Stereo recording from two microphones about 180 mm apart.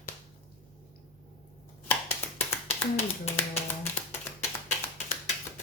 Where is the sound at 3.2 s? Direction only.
35° left (ahead or behind).